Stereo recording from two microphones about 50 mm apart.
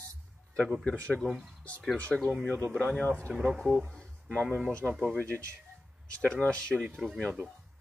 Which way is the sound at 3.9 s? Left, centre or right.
Centre.